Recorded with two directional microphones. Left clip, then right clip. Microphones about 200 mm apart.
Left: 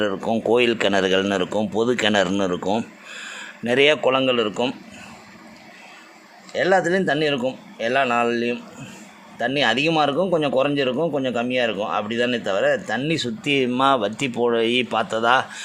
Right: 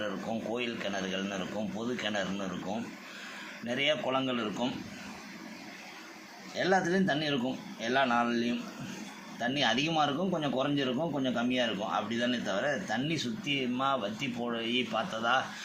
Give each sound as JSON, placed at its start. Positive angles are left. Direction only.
{"t": 0.5, "sound": "a man's voice", "side_deg": 55}
{"t": 6.5, "sound": "speech", "side_deg": 55}